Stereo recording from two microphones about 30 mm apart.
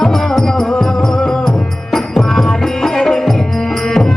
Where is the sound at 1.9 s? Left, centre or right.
Centre.